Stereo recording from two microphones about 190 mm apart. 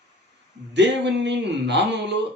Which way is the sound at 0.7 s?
70° right (ahead or behind).